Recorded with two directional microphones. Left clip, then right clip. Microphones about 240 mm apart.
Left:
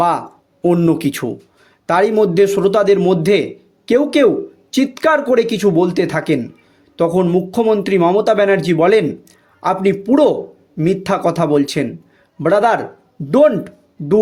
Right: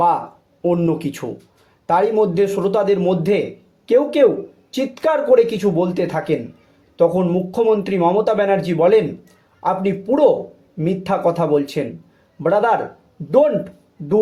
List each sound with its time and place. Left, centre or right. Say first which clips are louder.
0.6 s speech: left 4 dB; left